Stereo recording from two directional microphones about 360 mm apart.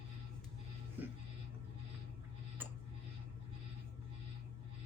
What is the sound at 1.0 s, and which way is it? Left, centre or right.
Music, centre.